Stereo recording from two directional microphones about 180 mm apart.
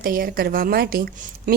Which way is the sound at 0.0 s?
55° right (ahead or behind).